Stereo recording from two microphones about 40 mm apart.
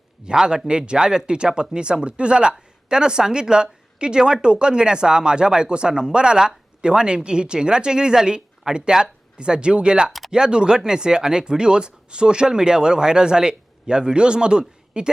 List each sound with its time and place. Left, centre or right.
0.3 s a woman's voice: right
10.1 s a sound: centre
10.3 s a woman's voice: centre